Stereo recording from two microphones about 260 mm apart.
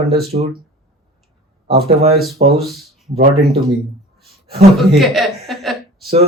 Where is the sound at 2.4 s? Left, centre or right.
Right.